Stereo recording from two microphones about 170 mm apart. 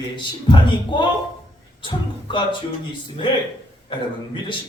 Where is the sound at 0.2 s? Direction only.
25° left (ahead or behind).